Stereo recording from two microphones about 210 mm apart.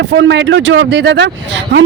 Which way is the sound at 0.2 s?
60° right (ahead or behind).